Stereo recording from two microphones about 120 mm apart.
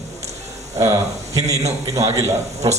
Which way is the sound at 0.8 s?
25° right (ahead or behind).